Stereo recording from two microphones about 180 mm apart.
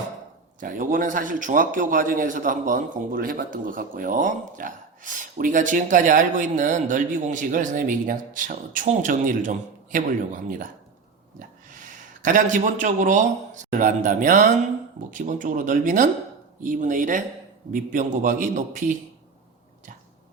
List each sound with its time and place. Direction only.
0.6 s a man's voice: 50° right (ahead or behind)